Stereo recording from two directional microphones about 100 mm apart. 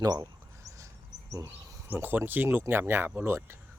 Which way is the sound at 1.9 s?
20° right (ahead or behind).